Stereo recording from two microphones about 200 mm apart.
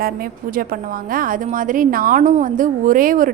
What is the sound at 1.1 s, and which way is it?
A woman's voice, 45° right (ahead or behind).